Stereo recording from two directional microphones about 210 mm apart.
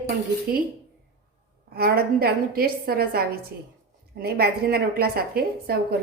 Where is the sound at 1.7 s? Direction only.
50° right (ahead or behind).